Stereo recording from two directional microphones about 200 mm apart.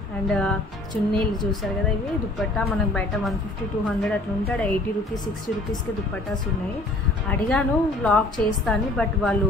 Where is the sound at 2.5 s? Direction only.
Centre (ahead or behind).